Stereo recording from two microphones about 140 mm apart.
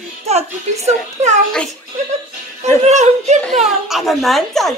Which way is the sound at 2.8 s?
55° right (ahead or behind).